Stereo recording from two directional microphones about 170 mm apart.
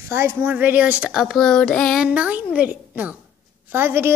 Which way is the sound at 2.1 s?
10° right (ahead or behind).